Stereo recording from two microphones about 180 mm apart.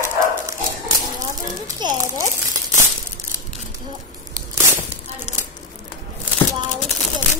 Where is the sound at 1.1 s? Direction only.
20° right (ahead or behind).